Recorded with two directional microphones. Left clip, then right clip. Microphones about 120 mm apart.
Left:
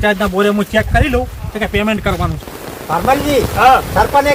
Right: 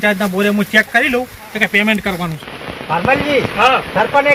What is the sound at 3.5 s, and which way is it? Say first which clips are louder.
Speech: left 4 dB; 20° left (ahead or behind).